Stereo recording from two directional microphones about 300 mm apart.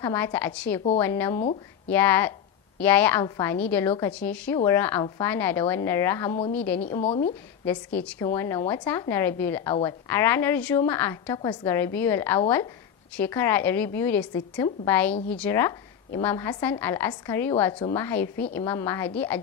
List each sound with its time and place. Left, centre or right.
0.0 s a woman's voice: centre
7.0 s speech: left
7.6 s a woman's voice: centre